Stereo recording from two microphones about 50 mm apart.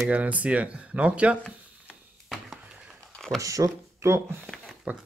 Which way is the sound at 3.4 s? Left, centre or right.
Right.